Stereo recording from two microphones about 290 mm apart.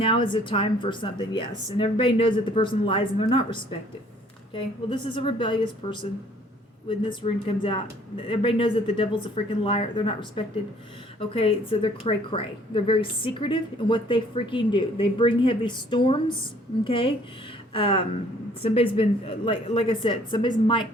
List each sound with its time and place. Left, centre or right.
0.0 s speech: centre